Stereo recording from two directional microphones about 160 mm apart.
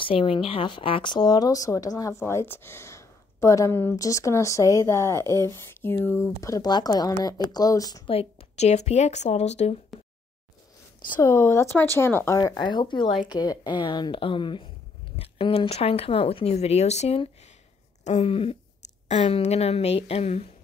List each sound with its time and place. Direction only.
0.0 s speech: 35° left (ahead or behind); by 5.1 s 20° left (ahead or behind)
5.1 s speech: 20° right (ahead or behind)
5.8 s speech: 15° left (ahead or behind)
8.1 s speech: 40° left (ahead or behind)
11.1 s speech: 15° left (ahead or behind); by 20.4 s 45° left (ahead or behind)